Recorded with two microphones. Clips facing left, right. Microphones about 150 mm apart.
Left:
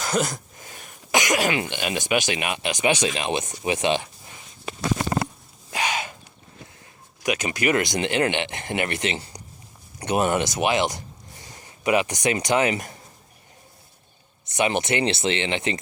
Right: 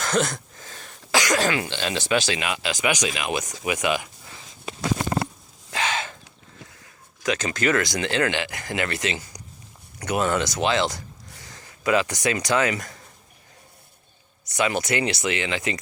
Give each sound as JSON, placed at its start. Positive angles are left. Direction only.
{"t": 0.0, "sound": "speech", "side_deg": 10}
{"t": 5.7, "sound": "a sound", "side_deg": 15}
{"t": 7.2, "sound": "speech", "side_deg": 15}
{"t": 14.4, "sound": "speech", "side_deg": 20}